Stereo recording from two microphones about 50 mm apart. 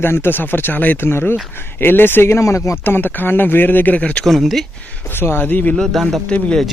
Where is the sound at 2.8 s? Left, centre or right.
Left.